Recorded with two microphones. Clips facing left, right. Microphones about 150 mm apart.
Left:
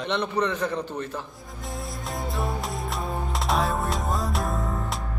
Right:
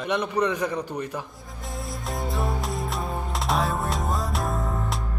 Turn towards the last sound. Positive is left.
turn(degrees=0)  # may be behind; listen again after turning